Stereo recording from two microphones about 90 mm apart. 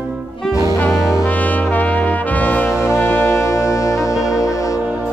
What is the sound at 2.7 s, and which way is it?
Music, 35° left (ahead or behind).